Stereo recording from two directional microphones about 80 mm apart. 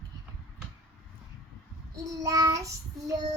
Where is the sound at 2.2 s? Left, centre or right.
Right.